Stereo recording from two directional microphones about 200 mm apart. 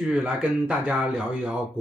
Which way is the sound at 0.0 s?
5° right (ahead or behind).